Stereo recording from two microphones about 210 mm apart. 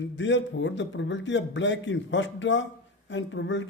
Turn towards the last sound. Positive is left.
turn(degrees=60)  # may be behind; listen again after turning